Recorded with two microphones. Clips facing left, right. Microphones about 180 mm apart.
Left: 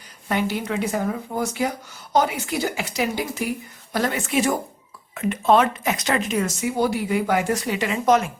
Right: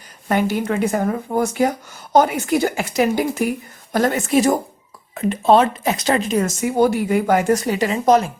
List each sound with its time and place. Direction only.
0.3 s speech: 50° right (ahead or behind)